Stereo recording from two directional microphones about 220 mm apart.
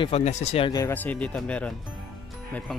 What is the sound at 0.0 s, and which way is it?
Speech, 30° left (ahead or behind).